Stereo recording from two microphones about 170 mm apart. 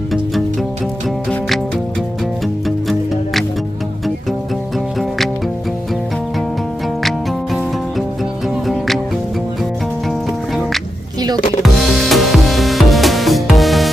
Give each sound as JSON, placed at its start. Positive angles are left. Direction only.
{"t": 1.3, "sound": "music", "side_deg": 0}
{"t": 4.9, "sound": "music", "side_deg": 0}
{"t": 7.5, "sound": "music", "side_deg": 0}
{"t": 10.1, "sound": "music", "side_deg": 0}